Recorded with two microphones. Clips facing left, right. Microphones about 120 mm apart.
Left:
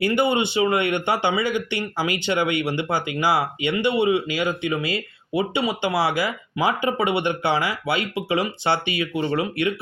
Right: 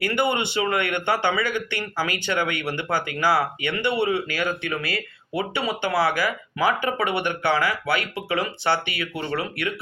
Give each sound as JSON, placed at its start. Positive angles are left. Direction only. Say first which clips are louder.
{"t": 0.0, "sound": "a man's voice", "louder": "left 3 dB", "side_deg": 20}